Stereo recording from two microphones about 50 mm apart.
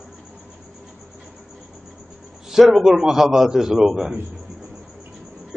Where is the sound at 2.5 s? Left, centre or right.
Centre.